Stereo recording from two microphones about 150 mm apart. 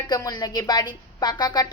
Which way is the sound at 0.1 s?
25° left (ahead or behind).